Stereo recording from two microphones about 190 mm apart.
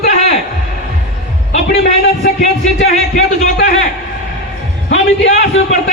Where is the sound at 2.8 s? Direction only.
35° left (ahead or behind).